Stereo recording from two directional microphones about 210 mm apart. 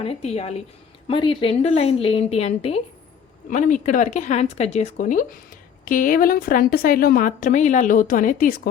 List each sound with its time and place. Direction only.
0.0 s a woman's voice: 30° left (ahead or behind)
3.5 s a woman's voice: 35° left (ahead or behind)